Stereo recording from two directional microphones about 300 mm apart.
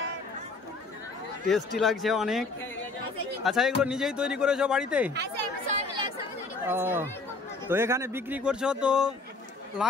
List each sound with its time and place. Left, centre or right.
1.8 s speech: centre
5.1 s chatter: right
6.6 s speech: centre